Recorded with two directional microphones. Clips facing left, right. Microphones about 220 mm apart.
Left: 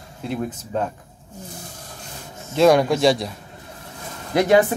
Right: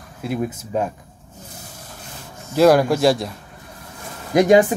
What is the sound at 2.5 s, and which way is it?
Speech, 5° right (ahead or behind).